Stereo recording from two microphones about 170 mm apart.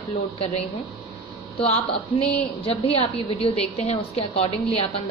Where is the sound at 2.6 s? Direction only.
35° left (ahead or behind).